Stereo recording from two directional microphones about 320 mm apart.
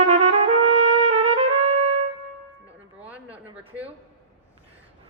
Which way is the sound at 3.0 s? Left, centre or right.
Centre.